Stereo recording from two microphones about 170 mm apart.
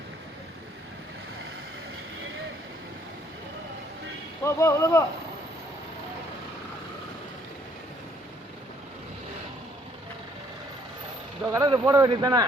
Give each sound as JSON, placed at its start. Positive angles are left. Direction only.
{"t": 4.4, "sound": "speech", "side_deg": 15}
{"t": 11.4, "sound": "speech", "side_deg": -20}